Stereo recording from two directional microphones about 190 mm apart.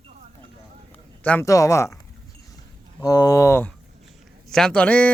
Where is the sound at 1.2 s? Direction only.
10° left (ahead or behind).